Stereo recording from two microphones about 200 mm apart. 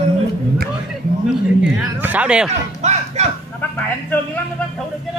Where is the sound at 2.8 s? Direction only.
35° right (ahead or behind).